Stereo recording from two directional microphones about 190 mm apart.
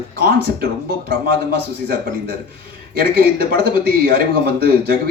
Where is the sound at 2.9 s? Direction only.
55° right (ahead or behind).